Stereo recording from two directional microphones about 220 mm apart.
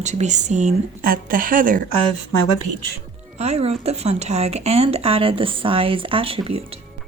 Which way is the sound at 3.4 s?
30° right (ahead or behind).